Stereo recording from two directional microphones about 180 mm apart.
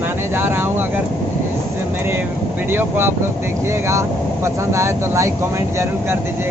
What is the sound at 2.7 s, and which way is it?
Speech, 15° right (ahead or behind).